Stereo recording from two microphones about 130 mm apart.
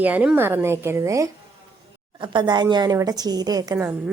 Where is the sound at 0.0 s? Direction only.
10° right (ahead or behind).